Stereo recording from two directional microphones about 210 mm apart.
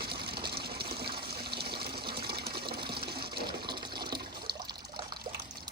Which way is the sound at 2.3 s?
50° right (ahead or behind).